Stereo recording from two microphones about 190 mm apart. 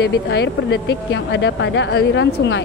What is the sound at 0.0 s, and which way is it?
A woman's voice, 60° left (ahead or behind).